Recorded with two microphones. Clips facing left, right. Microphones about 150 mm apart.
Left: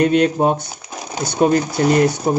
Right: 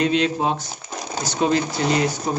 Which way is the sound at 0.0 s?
50° left (ahead or behind).